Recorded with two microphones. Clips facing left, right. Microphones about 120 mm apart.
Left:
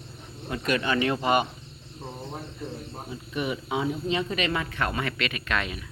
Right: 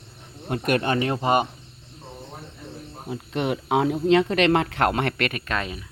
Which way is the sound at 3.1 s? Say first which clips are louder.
Right 5 dB; 75° right (ahead or behind).